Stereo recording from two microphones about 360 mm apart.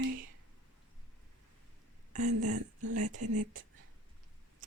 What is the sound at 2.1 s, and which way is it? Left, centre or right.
Speech, centre.